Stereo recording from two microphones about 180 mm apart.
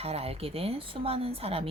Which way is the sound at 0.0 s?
35° right (ahead or behind).